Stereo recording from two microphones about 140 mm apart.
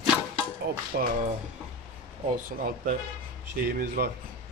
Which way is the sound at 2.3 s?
90° right.